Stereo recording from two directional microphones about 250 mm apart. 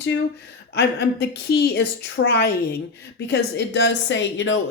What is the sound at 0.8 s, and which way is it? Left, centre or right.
A woman's voice, left.